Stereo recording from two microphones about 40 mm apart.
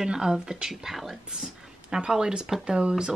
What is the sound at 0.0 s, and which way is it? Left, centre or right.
Speech, centre.